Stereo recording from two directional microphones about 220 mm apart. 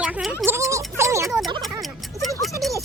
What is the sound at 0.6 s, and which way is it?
Speech, 15° right (ahead or behind).